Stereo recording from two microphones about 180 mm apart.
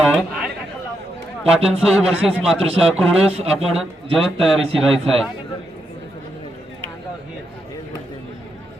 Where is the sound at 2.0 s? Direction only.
5° right (ahead or behind).